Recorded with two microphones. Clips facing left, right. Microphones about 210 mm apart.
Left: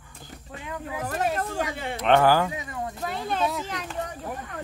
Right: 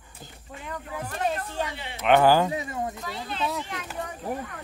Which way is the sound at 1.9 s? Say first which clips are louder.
Even; 5° right (ahead or behind).